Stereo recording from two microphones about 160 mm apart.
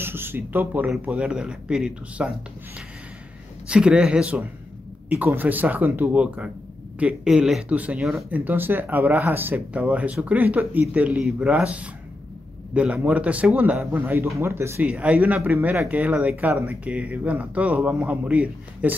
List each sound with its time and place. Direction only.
0.0 s speech: 15° right (ahead or behind)
3.6 s speech: 5° right (ahead or behind)
8.5 s speech: 10° right (ahead or behind)